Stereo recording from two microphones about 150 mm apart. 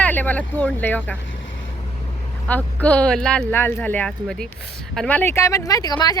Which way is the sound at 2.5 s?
10° left (ahead or behind).